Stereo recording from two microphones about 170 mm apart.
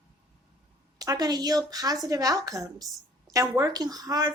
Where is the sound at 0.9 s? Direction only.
20° right (ahead or behind).